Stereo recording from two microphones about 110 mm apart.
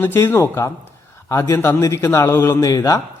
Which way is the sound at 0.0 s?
20° left (ahead or behind).